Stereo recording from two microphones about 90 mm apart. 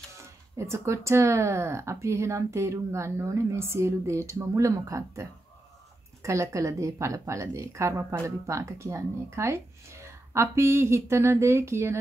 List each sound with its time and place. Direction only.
0.6 s a woman's voice: 30° right (ahead or behind)